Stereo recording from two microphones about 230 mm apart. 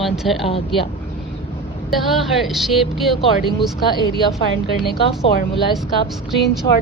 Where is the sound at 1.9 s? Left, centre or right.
Centre.